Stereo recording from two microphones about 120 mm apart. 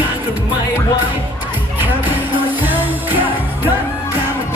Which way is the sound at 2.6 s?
15° right (ahead or behind).